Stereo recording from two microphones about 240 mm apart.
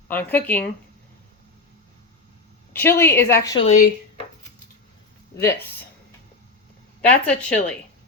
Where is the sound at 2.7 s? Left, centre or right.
Centre.